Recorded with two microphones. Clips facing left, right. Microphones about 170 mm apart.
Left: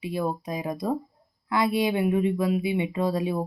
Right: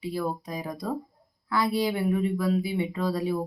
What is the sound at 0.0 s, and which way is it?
Speech, 20° left (ahead or behind).